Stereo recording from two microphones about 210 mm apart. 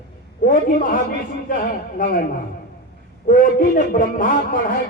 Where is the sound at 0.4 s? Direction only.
40° left (ahead or behind).